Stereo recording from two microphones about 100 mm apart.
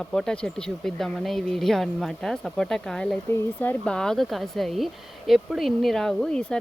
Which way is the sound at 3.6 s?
15° left (ahead or behind).